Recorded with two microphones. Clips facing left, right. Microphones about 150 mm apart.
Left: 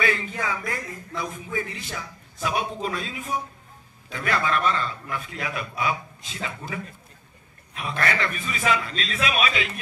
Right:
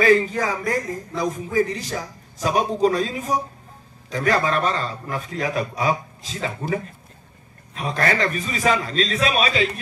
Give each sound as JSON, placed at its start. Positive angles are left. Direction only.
{"t": 0.0, "sound": "speech", "side_deg": -35}